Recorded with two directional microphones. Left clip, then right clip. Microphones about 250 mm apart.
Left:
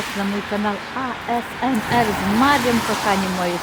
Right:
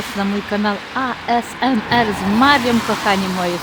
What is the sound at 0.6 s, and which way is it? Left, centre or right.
Speech, right.